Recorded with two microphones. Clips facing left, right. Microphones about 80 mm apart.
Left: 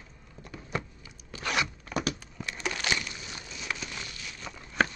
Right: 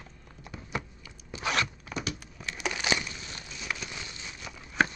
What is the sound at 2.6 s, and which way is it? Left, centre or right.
Crushing, centre.